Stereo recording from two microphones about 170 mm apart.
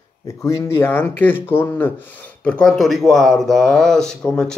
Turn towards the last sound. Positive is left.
turn(degrees=5)  # may be behind; listen again after turning